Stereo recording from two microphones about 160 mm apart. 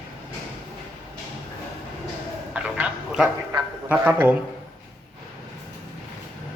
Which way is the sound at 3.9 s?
10° right (ahead or behind).